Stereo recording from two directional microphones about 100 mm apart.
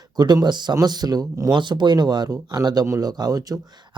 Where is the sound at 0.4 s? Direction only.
45° right (ahead or behind).